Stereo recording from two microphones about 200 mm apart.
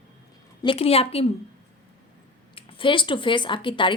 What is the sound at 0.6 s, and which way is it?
Speech, 25° left (ahead or behind).